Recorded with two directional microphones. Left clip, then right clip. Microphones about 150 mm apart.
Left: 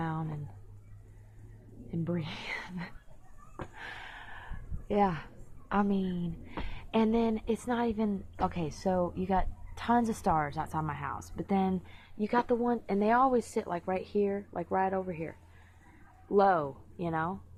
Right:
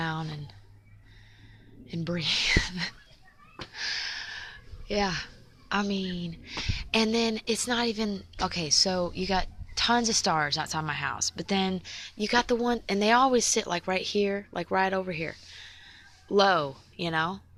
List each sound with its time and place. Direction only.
0.0 s a sound: 30° right (ahead or behind)
1.9 s speech: 20° right (ahead or behind)
3.8 s speech: 15° right (ahead or behind)
11.3 s speech: 20° right (ahead or behind); by 15.4 s 40° right (ahead or behind)
16.3 s speech: 25° right (ahead or behind)